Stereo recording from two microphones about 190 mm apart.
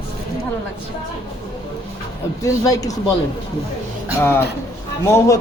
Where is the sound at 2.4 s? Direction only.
15° left (ahead or behind).